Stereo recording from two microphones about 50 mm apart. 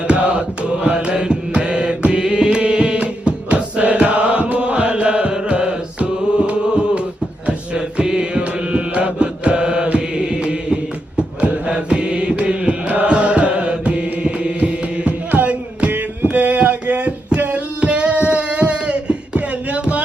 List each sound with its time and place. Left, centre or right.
0.1 s mantra: centre
7.4 s music: right
11.2 s mantra: right
15.3 s music: right
15.9 s a sound: right